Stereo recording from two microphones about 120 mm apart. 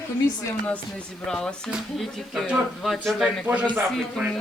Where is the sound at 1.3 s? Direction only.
5° left (ahead or behind).